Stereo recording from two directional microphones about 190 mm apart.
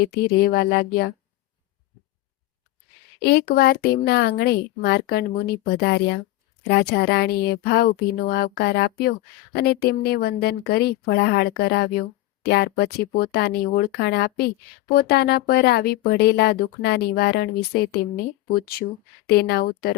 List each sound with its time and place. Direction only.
0.0 s speech: 55° left (ahead or behind)
3.2 s speech: 55° left (ahead or behind)